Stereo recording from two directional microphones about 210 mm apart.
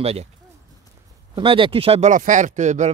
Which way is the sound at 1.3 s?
25° right (ahead or behind).